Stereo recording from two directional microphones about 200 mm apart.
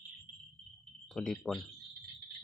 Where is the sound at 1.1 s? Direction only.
Centre (ahead or behind).